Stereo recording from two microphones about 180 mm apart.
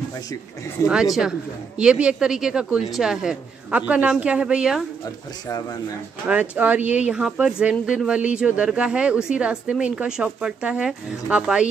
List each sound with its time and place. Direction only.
0.8 s speech: 15° left (ahead or behind)
1.8 s speech: 5° right (ahead or behind)
6.5 s speech: 10° right (ahead or behind)